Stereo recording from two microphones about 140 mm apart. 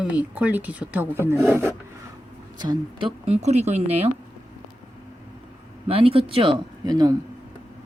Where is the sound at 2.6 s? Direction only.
30° right (ahead or behind).